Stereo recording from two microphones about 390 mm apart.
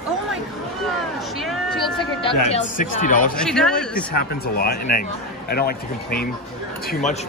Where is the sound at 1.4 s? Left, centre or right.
Centre.